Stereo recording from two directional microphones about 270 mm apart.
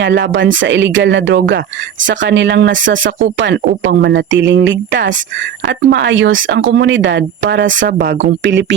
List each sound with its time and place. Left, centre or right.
0.0 s speech: right